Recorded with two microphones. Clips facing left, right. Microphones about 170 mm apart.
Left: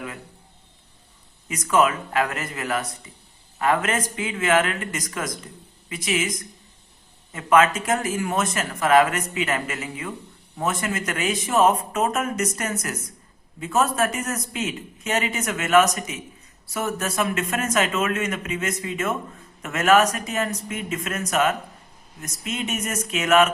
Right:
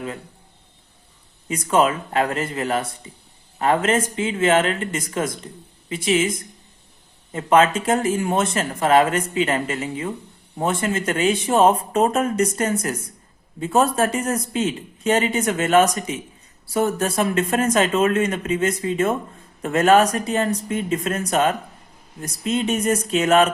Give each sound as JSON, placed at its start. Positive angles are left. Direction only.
{"t": 1.5, "sound": "speech", "side_deg": -30}